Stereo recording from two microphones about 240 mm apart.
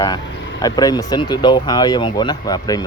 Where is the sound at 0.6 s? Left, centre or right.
Centre.